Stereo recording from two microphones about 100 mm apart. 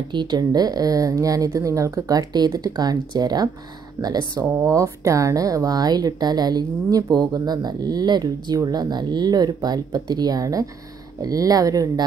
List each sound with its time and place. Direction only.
0.1 s speech: 50° right (ahead or behind)
4.6 s speech: 25° right (ahead or behind)